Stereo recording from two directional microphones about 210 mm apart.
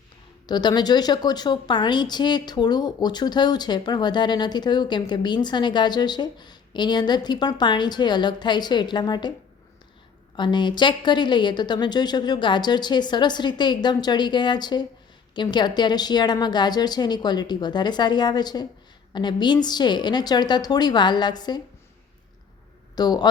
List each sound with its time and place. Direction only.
0.4 s a woman's voice: 20° left (ahead or behind)
10.3 s a woman's voice: 20° left (ahead or behind)
23.0 s a woman's voice: 20° left (ahead or behind)